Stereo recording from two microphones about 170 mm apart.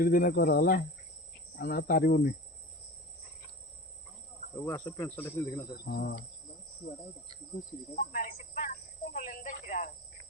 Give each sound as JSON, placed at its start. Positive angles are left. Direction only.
{"t": 0.0, "sound": "speech", "side_deg": 60}
{"t": 4.5, "sound": "cricket", "side_deg": 15}
{"t": 5.7, "sound": "cricket", "side_deg": 65}
{"t": 7.9, "sound": "speech", "side_deg": 50}
{"t": 9.1, "sound": "snake", "side_deg": 50}